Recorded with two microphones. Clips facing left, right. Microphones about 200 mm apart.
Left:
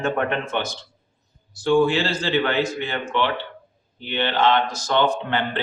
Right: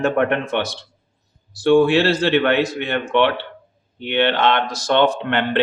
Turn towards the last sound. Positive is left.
turn(degrees=-65)  # may be behind; listen again after turning